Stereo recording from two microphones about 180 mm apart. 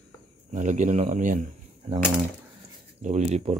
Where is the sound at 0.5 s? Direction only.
45° right (ahead or behind).